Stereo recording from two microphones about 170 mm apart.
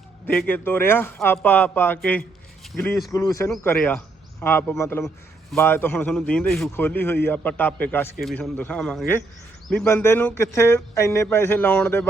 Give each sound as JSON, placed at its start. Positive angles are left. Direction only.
{"t": 0.3, "sound": "speech", "side_deg": 10}
{"t": 2.7, "sound": "speech", "side_deg": 0}
{"t": 3.1, "sound": "a man's voice", "side_deg": 20}